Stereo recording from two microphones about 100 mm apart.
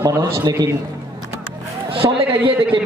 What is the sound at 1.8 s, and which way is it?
Speech, 65° right (ahead or behind).